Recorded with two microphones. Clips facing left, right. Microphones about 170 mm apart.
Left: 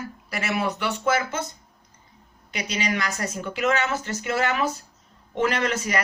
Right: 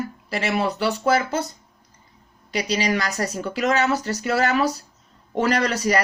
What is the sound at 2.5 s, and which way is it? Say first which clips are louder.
A woman's voice: right 5 dB; 35° right (ahead or behind).